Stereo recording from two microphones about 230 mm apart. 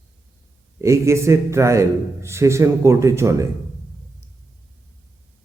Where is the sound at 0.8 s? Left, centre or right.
Centre.